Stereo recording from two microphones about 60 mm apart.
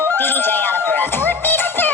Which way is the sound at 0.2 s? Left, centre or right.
Left.